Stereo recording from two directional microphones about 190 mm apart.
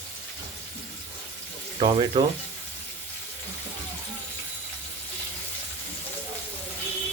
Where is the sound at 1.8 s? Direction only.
25° right (ahead or behind).